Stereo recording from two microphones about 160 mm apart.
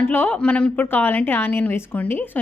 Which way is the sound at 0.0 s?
15° left (ahead or behind).